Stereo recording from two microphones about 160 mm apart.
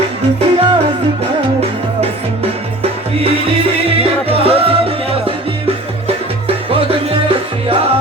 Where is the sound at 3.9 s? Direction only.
35° right (ahead or behind).